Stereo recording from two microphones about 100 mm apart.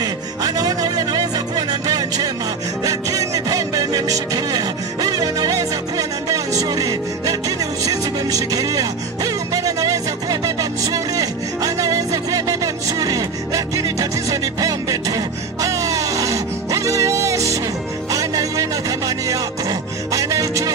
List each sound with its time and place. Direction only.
0.0 s music: 40° right (ahead or behind)